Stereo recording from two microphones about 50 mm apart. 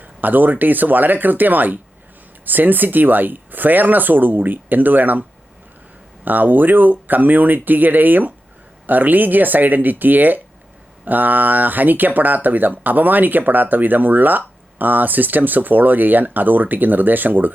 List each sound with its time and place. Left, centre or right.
0.0 s speech: right
6.2 s speech: right